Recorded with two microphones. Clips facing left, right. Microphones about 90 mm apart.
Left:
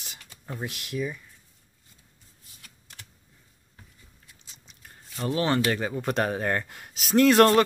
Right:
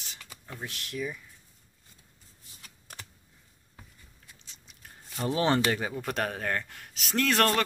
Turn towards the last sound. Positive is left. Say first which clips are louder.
# left 8 dB
turn(degrees=15)  # may be behind; listen again after turning